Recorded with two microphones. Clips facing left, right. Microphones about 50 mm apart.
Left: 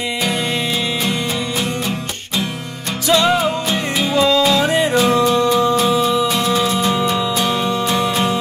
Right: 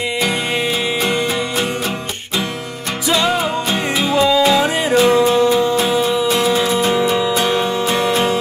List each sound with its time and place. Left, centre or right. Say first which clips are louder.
3.1 s music: left 2 dB; centre
5.0 s music: right 2 dB; centre